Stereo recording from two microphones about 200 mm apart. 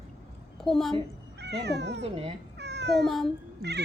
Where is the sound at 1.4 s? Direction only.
60° right (ahead or behind).